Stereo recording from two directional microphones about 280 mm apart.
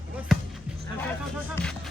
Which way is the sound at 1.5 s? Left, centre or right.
Centre.